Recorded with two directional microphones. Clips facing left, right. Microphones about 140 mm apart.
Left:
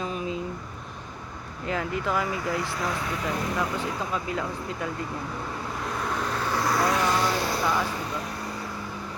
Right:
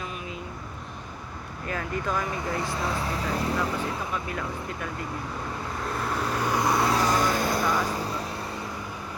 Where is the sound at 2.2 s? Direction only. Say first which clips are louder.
Left 1 dB; 20° right (ahead or behind).